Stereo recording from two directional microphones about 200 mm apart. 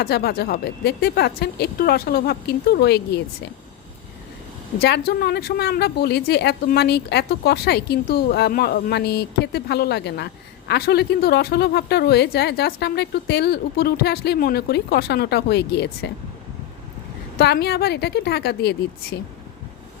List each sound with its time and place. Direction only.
0.0 s speech: 50° left (ahead or behind)
4.8 s speech: 50° left (ahead or behind)
17.3 s speech: 55° left (ahead or behind)